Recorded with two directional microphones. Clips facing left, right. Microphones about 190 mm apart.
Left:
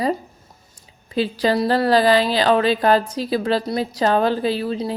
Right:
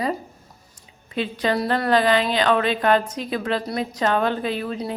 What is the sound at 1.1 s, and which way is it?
A woman's voice, 35° left (ahead or behind).